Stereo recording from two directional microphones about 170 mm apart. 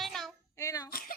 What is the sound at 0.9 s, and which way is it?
Speech, 60° left (ahead or behind).